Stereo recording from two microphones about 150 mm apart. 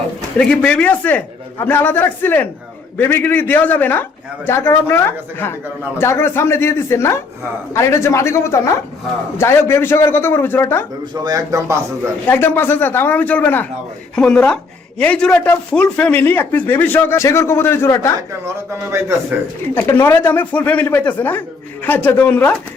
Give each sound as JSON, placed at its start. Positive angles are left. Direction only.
{"t": 0.3, "sound": "a man's voice", "side_deg": 5}
{"t": 11.1, "sound": "speech", "side_deg": -25}
{"t": 12.3, "sound": "speech", "side_deg": 15}
{"t": 18.4, "sound": "speech", "side_deg": -20}
{"t": 19.7, "sound": "speech", "side_deg": 15}